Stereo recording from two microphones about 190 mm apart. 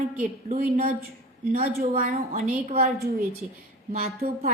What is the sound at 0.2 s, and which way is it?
A woman's voice, 40° right (ahead or behind).